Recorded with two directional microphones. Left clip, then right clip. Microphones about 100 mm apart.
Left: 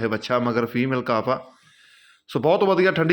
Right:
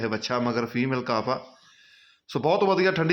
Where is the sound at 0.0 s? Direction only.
30° left (ahead or behind).